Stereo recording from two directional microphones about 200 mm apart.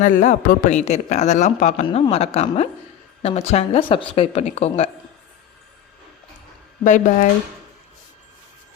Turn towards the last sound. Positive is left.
turn(degrees=40)  # may be behind; listen again after turning